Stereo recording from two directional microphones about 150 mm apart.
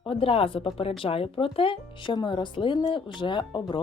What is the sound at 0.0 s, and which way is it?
Speech, 35° left (ahead or behind).